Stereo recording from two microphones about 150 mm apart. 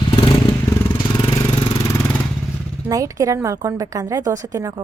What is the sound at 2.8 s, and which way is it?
A woman's voice, 20° right (ahead or behind).